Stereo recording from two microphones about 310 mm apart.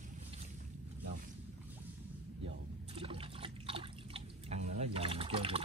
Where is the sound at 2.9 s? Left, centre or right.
Centre.